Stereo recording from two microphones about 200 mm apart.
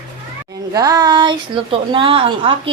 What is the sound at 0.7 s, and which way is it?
A woman's voice, 20° right (ahead or behind).